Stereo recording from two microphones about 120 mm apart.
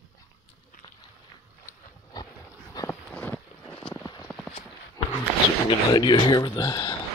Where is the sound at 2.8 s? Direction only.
30° left (ahead or behind).